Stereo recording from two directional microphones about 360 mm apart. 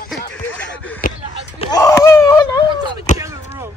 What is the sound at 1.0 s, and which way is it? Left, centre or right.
Basketball bounce, left.